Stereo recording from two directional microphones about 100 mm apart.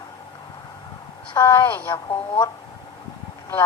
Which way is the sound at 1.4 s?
25° left (ahead or behind).